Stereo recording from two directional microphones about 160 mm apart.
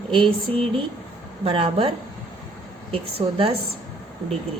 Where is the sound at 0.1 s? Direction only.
35° right (ahead or behind).